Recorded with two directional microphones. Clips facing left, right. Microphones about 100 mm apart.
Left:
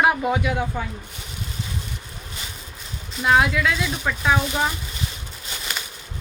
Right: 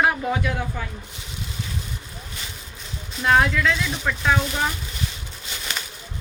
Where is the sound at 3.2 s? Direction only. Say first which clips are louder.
Even; 10° left (ahead or behind).